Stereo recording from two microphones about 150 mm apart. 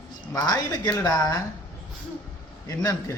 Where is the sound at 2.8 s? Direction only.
20° left (ahead or behind).